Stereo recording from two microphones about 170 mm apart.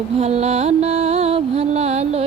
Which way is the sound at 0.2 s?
40° right (ahead or behind).